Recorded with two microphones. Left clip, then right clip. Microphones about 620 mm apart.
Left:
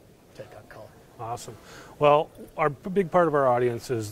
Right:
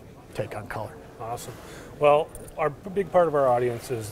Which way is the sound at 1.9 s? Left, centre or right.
Left.